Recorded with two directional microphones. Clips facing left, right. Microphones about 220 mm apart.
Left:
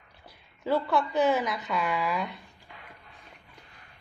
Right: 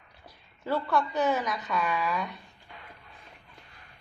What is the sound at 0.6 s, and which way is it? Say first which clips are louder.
A woman's voice: left 2 dB; 10° left (ahead or behind).